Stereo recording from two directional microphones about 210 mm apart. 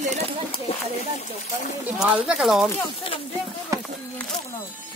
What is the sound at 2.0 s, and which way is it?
Speech, centre (ahead or behind).